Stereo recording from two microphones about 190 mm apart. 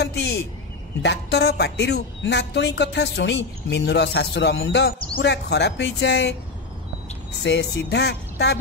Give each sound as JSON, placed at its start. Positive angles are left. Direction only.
{"t": 0.0, "sound": "a sound", "side_deg": 65}
{"t": 1.0, "sound": "speech", "side_deg": 65}
{"t": 7.4, "sound": "speech", "side_deg": 65}